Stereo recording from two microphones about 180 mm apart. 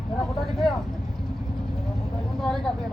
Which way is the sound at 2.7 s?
5° left (ahead or behind).